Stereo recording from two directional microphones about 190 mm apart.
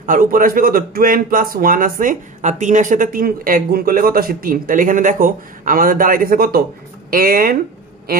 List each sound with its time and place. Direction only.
0.0 s a man's voice: 45° right (ahead or behind)